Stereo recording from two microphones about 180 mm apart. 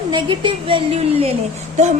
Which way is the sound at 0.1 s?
25° right (ahead or behind).